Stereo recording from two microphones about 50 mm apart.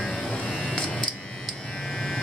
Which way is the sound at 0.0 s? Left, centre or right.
Centre.